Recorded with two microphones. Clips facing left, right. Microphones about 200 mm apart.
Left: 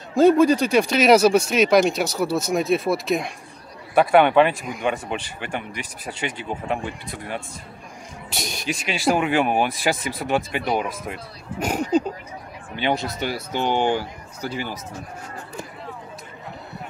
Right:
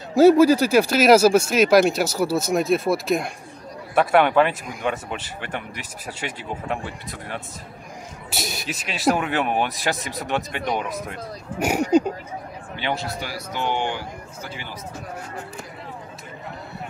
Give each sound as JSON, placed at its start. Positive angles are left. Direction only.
{"t": 0.1, "sound": "speech", "side_deg": -5}
{"t": 11.6, "sound": "speech", "side_deg": -10}
{"t": 12.7, "sound": "speech", "side_deg": 15}